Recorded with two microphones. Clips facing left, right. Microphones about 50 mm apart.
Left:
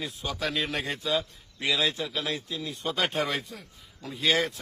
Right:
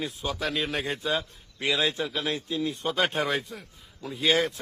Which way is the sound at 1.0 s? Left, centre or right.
Right.